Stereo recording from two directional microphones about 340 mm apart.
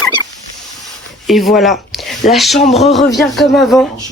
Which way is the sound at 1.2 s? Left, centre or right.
Centre.